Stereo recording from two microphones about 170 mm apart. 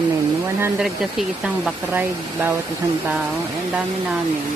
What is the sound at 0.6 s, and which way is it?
Speech, 5° right (ahead or behind).